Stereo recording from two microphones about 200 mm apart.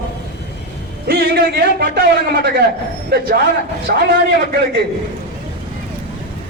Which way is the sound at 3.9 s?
50° right (ahead or behind).